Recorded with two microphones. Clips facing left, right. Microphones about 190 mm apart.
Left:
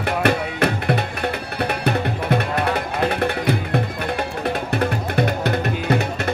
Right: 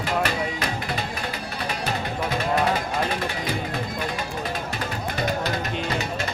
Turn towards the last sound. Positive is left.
turn(degrees=60)  # may be behind; listen again after turning